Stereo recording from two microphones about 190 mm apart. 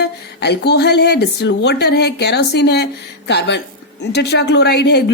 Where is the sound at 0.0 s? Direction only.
60° left (ahead or behind).